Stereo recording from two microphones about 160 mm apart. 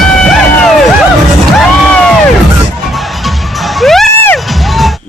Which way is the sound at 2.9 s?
Centre (ahead or behind).